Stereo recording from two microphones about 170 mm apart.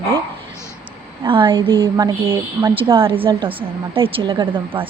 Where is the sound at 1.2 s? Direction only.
30° right (ahead or behind).